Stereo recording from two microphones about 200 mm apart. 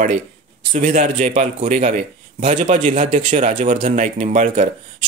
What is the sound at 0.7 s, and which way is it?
A man's voice, 40° right (ahead or behind).